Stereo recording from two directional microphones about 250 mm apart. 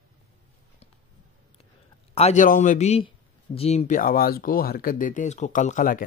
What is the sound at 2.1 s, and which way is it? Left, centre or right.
A man's voice, left.